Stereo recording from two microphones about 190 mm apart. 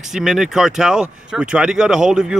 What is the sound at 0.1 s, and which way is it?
Speech, centre (ahead or behind).